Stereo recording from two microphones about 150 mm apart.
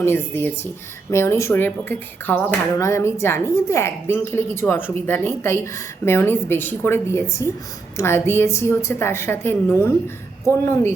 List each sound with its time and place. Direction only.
0.0 s a woman's voice: 15° left (ahead or behind)